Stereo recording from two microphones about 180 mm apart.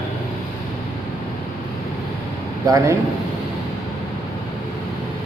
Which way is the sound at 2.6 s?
15° right (ahead or behind).